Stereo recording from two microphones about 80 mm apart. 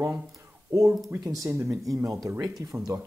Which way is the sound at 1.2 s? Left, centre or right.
Right.